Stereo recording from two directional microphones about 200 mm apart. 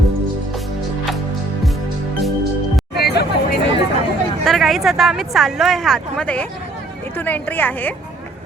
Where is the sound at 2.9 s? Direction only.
55° left (ahead or behind).